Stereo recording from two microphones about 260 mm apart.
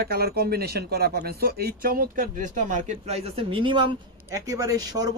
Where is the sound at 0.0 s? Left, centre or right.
Right.